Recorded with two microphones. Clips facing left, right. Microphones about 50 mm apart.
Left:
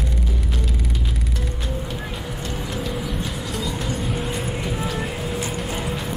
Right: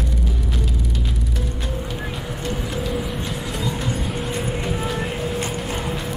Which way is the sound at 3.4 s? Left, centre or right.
Right.